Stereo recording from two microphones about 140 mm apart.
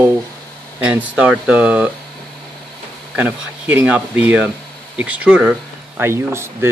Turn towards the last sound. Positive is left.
turn(degrees=-20)  # may be behind; listen again after turning